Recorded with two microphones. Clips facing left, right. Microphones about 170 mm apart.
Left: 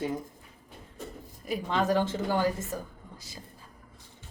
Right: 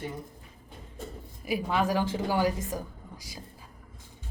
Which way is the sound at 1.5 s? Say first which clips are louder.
Even; 10° right (ahead or behind).